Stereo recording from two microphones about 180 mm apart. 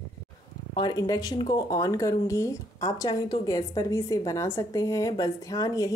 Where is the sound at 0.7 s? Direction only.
20° left (ahead or behind).